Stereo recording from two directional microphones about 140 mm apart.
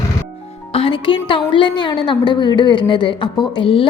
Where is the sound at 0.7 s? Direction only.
40° left (ahead or behind).